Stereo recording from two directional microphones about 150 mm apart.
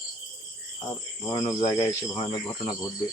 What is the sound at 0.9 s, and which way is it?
Speech, 20° left (ahead or behind).